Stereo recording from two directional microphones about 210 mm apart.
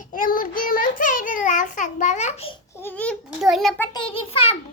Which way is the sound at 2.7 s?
10° left (ahead or behind).